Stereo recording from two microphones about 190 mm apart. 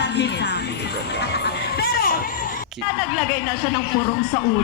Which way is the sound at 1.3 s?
60° left (ahead or behind).